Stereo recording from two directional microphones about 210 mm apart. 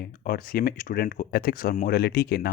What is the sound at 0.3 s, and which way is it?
Speech, 45° left (ahead or behind).